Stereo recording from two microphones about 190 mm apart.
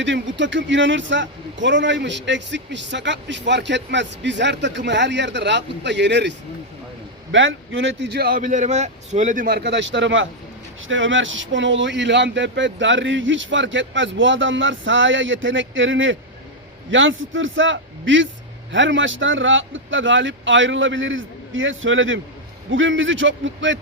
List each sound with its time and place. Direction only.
0.0 s a man's voice: 70° right (ahead or behind)
7.3 s a man's voice: 85° right